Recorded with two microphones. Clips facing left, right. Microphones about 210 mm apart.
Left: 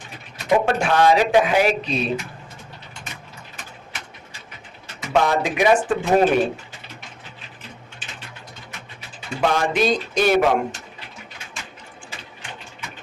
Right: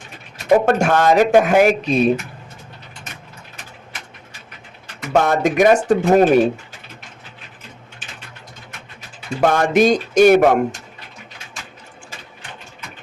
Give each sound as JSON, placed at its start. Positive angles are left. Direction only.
{"t": 0.4, "sound": "speech", "side_deg": -45}
{"t": 5.1, "sound": "speech", "side_deg": -50}
{"t": 9.4, "sound": "speech", "side_deg": -45}